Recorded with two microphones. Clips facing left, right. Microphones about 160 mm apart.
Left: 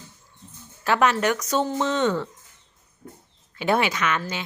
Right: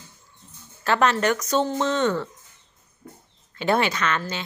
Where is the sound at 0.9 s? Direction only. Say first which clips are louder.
Even; 10° left (ahead or behind).